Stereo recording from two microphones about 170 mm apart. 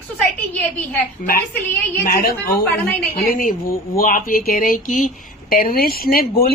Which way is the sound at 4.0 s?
55° left (ahead or behind).